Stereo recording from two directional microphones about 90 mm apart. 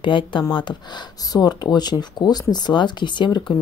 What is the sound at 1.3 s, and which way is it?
Speech, 50° left (ahead or behind).